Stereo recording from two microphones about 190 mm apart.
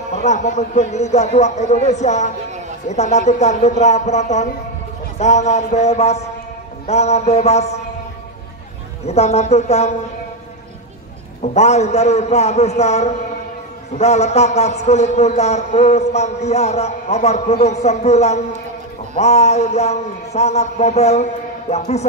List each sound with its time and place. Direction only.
0.1 s a man's voice: 35° left (ahead or behind)
9.0 s a man's voice: 35° left (ahead or behind)
11.5 s a man's voice: 35° left (ahead or behind)